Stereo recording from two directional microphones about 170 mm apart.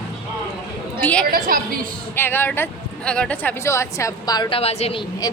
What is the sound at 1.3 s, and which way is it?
Speech, 55° right (ahead or behind).